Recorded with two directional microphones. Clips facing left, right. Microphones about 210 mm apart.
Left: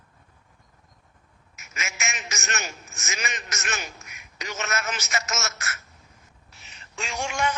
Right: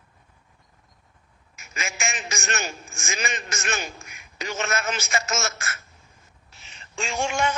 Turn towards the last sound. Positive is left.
turn(degrees=-25)  # may be behind; listen again after turning